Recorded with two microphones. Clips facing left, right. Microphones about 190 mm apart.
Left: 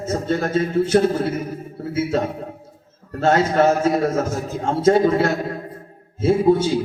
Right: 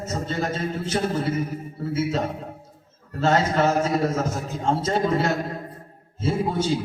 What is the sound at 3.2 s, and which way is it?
A man's voice, 55° left (ahead or behind).